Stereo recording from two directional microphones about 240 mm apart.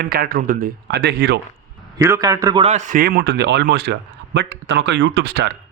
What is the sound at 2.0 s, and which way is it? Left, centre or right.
Speech, centre.